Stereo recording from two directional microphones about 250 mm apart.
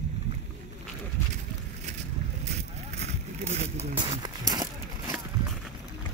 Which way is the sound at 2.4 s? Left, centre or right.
Right.